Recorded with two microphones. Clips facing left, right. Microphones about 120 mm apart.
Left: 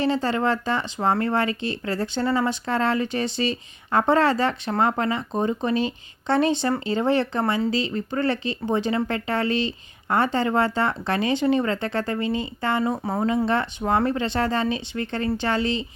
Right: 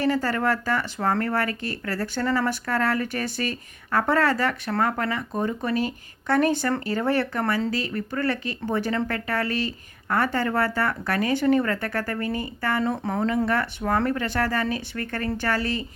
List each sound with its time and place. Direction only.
0.0 s speech: 25° left (ahead or behind)